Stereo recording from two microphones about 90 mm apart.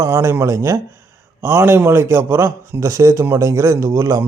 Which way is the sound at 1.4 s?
25° right (ahead or behind).